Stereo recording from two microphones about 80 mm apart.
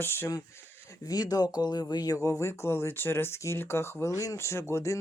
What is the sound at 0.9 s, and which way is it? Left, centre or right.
Speech, left.